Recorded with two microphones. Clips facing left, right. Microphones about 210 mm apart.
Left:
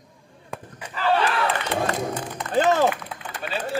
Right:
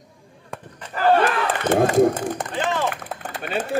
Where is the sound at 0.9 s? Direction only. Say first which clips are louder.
Right 4 dB; 50° right (ahead or behind).